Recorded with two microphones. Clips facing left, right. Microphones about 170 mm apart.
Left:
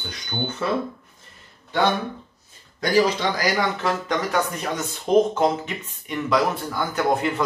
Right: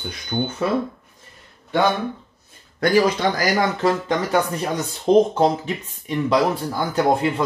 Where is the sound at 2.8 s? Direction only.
60° right (ahead or behind).